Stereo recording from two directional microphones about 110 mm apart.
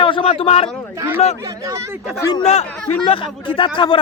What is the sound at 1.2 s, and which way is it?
Speech, 80° left.